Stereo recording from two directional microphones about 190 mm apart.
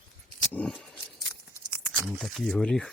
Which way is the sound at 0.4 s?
5° left (ahead or behind).